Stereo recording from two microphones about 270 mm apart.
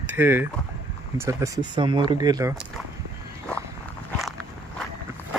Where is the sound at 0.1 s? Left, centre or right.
Centre.